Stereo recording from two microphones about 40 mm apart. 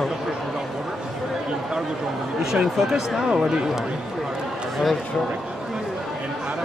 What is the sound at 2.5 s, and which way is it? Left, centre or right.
Speech, centre.